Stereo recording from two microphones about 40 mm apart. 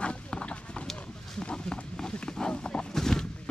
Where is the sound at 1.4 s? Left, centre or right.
Left.